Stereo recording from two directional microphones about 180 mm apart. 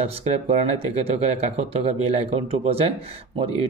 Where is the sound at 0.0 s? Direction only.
35° right (ahead or behind).